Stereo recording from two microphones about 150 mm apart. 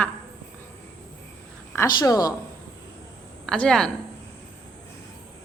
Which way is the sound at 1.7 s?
20° left (ahead or behind).